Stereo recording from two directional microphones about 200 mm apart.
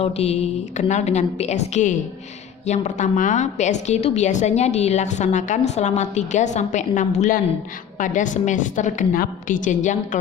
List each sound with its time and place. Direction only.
0.0 s a woman's voice: 30° left (ahead or behind)